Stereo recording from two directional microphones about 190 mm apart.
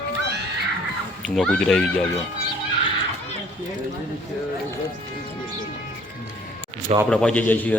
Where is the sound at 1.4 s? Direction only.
5° left (ahead or behind).